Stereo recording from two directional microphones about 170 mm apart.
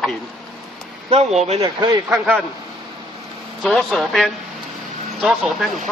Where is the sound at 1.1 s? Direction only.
40° right (ahead or behind).